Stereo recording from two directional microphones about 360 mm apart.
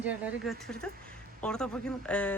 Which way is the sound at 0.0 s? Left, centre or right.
Centre.